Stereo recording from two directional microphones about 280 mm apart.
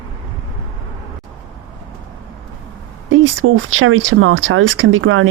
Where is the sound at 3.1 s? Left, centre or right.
Right.